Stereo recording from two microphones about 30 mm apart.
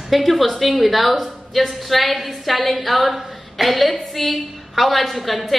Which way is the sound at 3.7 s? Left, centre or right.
Centre.